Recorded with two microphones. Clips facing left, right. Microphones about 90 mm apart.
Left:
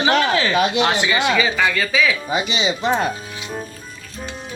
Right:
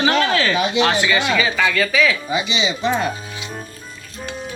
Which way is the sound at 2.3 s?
45° left (ahead or behind).